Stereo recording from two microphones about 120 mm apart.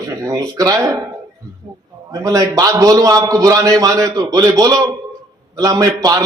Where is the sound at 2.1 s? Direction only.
30° right (ahead or behind).